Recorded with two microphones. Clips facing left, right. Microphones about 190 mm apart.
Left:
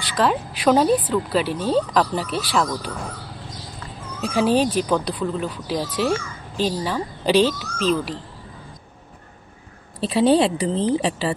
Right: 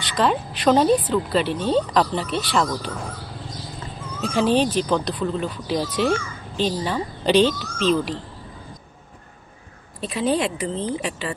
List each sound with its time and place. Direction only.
0.0 s speech: 5° left (ahead or behind)
4.2 s speech: 5° left (ahead or behind)
9.9 s a woman's voice: 30° left (ahead or behind)